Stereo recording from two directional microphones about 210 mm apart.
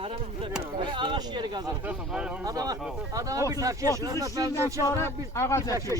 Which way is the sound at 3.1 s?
15° right (ahead or behind).